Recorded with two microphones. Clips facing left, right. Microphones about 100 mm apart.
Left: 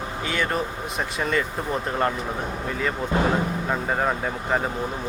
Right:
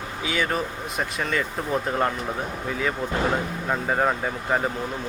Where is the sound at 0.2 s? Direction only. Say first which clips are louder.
Even; centre (ahead or behind).